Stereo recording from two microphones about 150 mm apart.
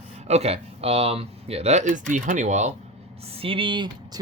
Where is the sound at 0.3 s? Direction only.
45° right (ahead or behind).